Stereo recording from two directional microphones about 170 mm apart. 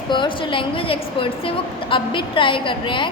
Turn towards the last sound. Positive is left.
turn(degrees=30)  # may be behind; listen again after turning